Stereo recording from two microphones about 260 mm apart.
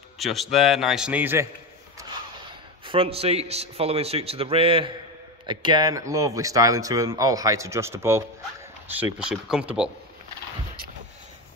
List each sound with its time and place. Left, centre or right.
0.2 s a man's voice: centre
2.8 s a man's voice: right; by 9.8 s centre